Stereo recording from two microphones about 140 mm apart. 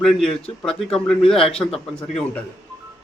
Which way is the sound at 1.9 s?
5° left (ahead or behind).